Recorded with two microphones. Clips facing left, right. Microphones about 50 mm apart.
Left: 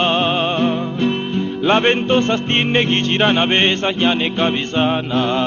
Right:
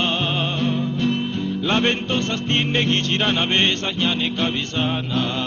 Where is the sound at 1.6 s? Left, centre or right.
Left.